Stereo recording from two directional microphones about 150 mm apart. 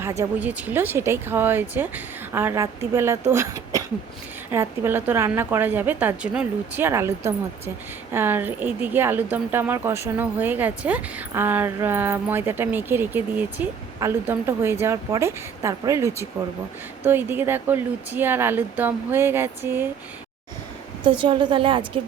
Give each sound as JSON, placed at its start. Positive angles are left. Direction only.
{"t": 0.0, "sound": "speech", "side_deg": -20}
{"t": 8.1, "sound": "speech", "side_deg": -15}
{"t": 21.0, "sound": "a woman's voice", "side_deg": -35}